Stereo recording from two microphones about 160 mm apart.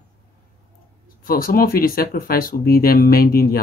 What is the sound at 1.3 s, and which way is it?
Speech, 65° left (ahead or behind).